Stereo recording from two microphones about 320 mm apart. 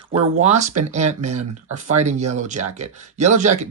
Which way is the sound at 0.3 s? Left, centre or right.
Right.